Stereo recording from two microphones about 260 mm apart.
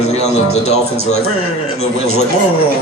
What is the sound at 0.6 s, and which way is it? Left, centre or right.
Speech, left.